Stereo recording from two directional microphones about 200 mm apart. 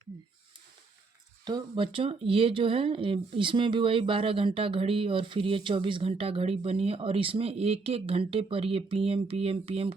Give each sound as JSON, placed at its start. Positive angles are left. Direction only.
{"t": 1.5, "sound": "speech", "side_deg": -25}